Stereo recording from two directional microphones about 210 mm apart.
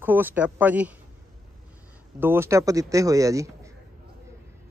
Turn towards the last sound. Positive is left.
turn(degrees=-15)  # may be behind; listen again after turning